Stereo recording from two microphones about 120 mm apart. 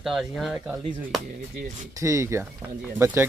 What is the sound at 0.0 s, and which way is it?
Speech, centre (ahead or behind).